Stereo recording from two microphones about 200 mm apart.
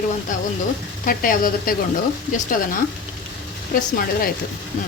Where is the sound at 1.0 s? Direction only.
45° left (ahead or behind).